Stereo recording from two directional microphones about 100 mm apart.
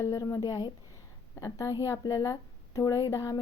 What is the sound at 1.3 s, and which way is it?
A woman's voice, 35° left (ahead or behind).